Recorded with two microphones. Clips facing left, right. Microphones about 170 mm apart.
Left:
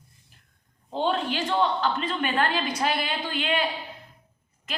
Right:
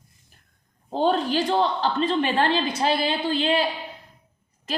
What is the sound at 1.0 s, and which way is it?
A woman's voice, 40° right (ahead or behind).